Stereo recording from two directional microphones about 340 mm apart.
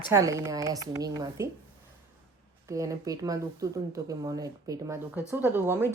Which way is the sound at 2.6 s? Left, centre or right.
Centre.